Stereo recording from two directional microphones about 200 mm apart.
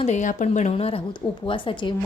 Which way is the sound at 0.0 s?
35° left (ahead or behind).